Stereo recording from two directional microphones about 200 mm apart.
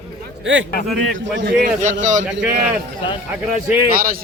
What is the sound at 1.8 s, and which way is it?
Speech, 35° right (ahead or behind).